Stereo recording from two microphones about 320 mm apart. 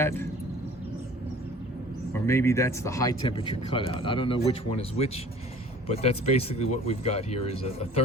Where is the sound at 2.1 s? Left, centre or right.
Centre.